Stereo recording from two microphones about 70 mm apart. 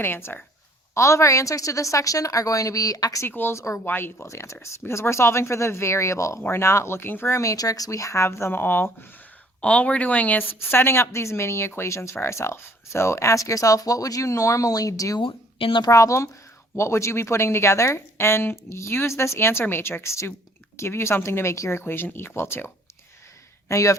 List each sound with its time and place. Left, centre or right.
0.0 s a woman's voice: left
0.9 s speech: left
3.2 s a woman's voice: left
4.3 s a woman's voice: left
7.5 s speech: left
9.6 s a woman's voice: centre; by 22.7 s left
23.6 s speech: left